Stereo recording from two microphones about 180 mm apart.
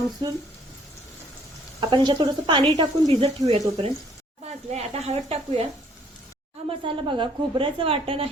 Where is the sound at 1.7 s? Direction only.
25° right (ahead or behind).